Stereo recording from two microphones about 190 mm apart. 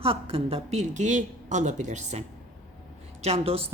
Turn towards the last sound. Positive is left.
turn(degrees=-30)  # may be behind; listen again after turning